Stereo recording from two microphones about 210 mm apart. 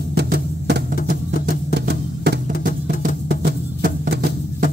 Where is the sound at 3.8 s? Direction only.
40° right (ahead or behind).